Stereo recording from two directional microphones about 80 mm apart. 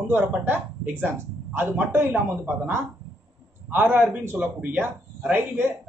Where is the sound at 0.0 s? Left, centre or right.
Right.